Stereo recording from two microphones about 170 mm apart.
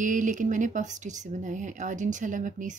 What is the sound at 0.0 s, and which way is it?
Speech, 50° right (ahead or behind).